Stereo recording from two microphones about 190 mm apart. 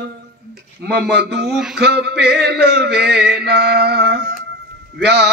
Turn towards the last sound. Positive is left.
turn(degrees=-60)  # may be behind; listen again after turning